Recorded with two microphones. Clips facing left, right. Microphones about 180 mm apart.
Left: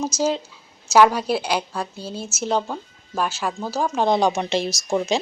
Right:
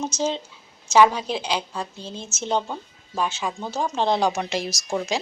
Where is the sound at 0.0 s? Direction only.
10° left (ahead or behind).